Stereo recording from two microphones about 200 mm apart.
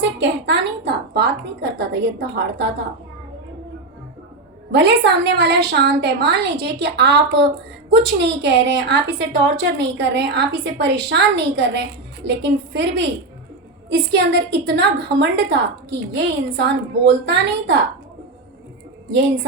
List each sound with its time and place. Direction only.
0.0 s a woman's voice: 60° right (ahead or behind)
4.7 s a woman's voice: 60° right (ahead or behind)